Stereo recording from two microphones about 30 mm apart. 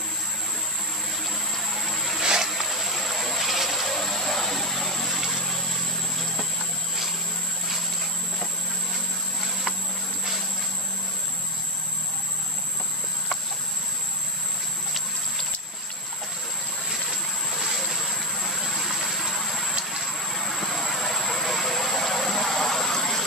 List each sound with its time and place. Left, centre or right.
1.2 s pump: centre
2.1 s a sound: centre
2.5 s a sound: centre
3.3 s vehicle: centre
3.9 s vehicle: centre
18.3 s vehicle: centre